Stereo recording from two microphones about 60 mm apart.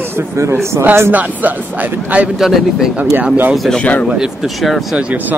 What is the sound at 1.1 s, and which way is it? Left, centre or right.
A man's voice, right.